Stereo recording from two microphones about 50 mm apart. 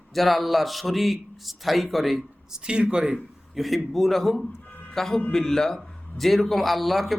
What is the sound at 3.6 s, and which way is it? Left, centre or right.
A man's voice, centre.